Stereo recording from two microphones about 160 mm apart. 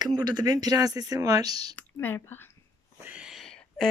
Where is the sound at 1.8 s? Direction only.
10° left (ahead or behind).